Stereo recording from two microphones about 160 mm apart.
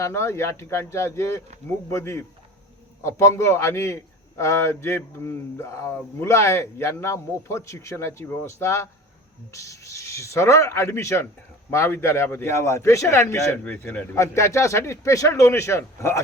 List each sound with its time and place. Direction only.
0.0 s a man's voice: 15° left (ahead or behind)